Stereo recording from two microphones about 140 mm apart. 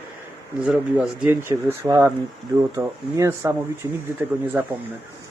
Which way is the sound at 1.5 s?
25° right (ahead or behind).